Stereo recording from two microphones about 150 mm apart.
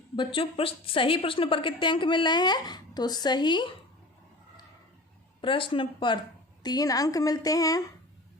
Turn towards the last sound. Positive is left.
turn(degrees=25)  # may be behind; listen again after turning